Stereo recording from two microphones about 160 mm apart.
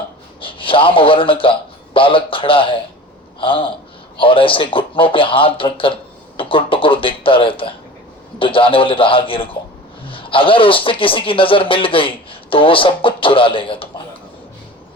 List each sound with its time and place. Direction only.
0.4 s a man's voice: 35° left (ahead or behind)